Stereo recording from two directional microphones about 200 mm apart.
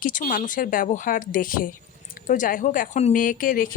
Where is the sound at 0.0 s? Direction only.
40° left (ahead or behind).